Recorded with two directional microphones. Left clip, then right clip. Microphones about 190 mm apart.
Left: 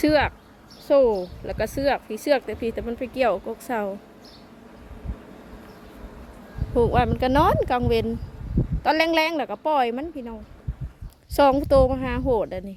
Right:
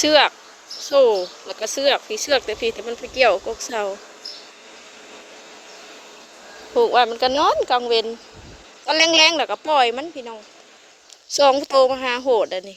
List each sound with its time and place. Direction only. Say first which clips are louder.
0.0 s speech: right 5 dB; 5° left (ahead or behind)
6.7 s speech: right 5 dB; 10° left (ahead or behind)